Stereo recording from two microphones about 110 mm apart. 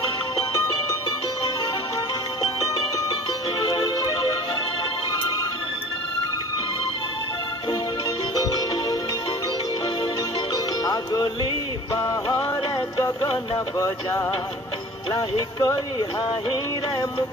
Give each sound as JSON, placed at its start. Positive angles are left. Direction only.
{"t": 10.8, "sound": "music", "side_deg": 35}
{"t": 12.0, "sound": "music", "side_deg": 25}
{"t": 13.7, "sound": "music", "side_deg": 25}
{"t": 15.6, "sound": "speech", "side_deg": 30}